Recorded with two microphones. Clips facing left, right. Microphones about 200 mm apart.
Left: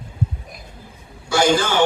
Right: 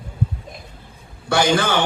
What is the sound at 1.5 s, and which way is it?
Speech, 60° right (ahead or behind).